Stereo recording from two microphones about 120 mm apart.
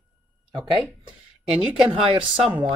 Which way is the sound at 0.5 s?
Centre (ahead or behind).